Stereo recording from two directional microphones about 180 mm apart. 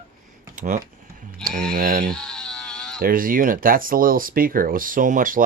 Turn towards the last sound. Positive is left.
turn(degrees=-50)  # may be behind; listen again after turning